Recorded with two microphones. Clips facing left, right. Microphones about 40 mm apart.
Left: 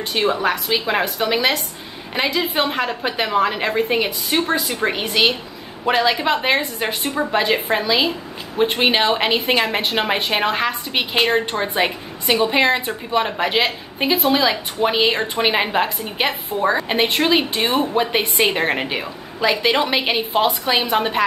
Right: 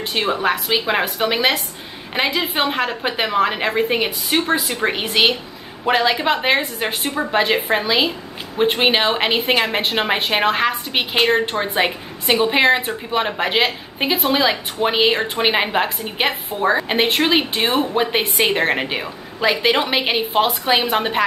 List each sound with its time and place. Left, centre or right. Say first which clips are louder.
0.3 s a woman's voice: right 4 dB; centre